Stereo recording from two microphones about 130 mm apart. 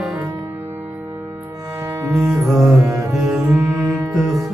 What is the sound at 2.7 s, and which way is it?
Music, 25° right (ahead or behind).